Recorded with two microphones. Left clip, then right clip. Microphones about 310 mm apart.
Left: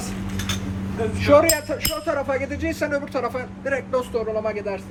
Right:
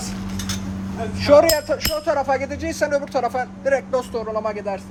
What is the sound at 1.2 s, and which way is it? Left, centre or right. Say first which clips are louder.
Speech: right 3 dB; right.